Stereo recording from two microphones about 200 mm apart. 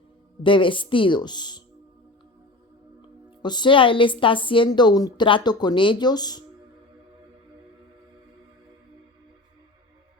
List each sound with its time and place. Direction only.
0.4 s a woman's voice: 25° left (ahead or behind)
3.4 s a woman's voice: 20° left (ahead or behind)